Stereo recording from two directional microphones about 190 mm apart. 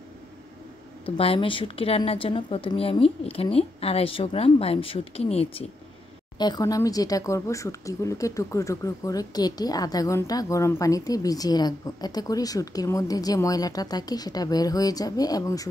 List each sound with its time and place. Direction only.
1.0 s a woman's voice: 30° left (ahead or behind)